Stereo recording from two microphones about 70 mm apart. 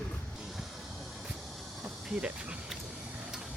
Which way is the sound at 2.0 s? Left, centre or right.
Centre.